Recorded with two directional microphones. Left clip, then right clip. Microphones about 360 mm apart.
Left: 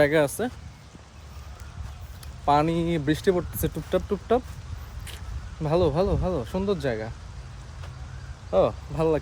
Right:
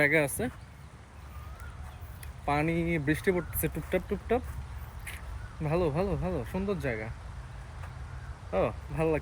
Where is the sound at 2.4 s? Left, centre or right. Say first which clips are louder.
Left 8 dB; centre.